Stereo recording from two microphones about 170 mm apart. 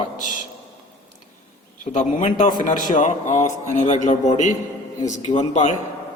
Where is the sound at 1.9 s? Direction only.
45° left (ahead or behind).